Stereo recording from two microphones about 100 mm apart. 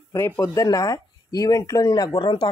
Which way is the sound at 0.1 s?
30° left (ahead or behind).